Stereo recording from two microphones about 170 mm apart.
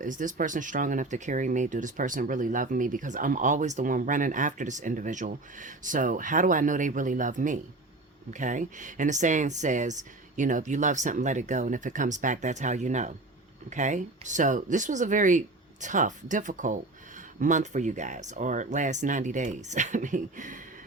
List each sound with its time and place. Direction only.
0.0 s speech: 50° right (ahead or behind)